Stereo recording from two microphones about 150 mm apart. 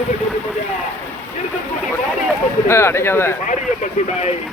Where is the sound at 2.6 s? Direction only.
15° left (ahead or behind).